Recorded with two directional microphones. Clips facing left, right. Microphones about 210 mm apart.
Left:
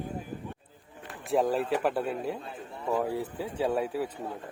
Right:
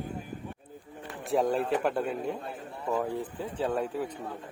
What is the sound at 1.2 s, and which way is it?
A man's voice, centre (ahead or behind).